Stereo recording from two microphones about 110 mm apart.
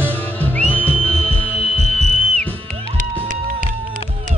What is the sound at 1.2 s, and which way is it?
Music, 90° right.